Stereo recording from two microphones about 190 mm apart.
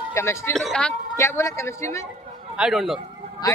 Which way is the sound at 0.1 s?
15° left (ahead or behind).